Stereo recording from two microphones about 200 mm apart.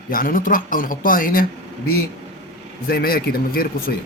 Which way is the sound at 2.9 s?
50° left (ahead or behind).